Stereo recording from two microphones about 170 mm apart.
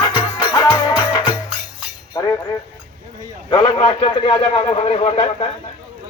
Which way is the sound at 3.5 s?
30° left (ahead or behind).